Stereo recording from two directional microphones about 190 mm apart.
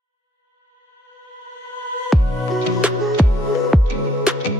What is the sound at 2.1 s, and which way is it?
Music, centre (ahead or behind).